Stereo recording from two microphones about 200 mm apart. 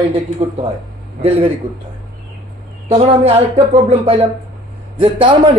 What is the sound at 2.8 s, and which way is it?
Speech, 30° right (ahead or behind).